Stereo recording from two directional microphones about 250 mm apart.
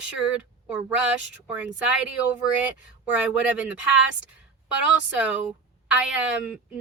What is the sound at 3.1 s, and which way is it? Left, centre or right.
Speech, centre.